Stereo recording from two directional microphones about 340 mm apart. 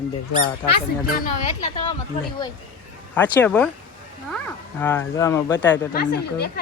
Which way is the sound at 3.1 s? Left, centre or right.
Centre.